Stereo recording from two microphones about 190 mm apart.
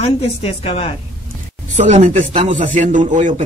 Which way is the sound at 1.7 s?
40° right (ahead or behind).